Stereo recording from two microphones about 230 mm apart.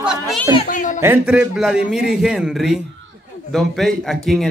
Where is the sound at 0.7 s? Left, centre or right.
Left.